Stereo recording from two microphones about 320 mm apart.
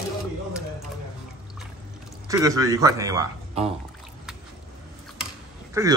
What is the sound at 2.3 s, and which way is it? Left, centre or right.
Speech, centre.